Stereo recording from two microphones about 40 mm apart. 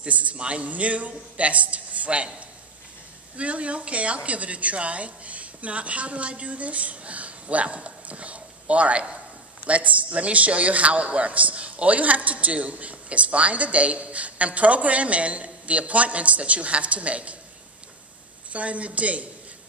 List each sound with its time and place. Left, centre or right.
0.0 s a man's voice: right
3.3 s a man's voice: right
18.5 s a man's voice: right